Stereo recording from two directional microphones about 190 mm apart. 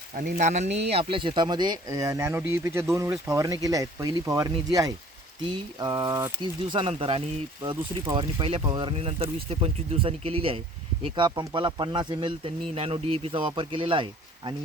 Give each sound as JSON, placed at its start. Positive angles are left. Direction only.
{"t": 0.2, "sound": "speech", "side_deg": -40}